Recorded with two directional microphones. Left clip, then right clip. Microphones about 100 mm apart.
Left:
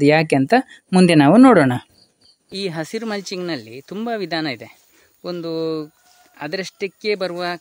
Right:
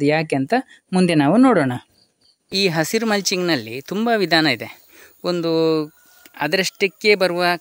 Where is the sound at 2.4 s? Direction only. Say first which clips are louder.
Right 7 dB; 30° right (ahead or behind).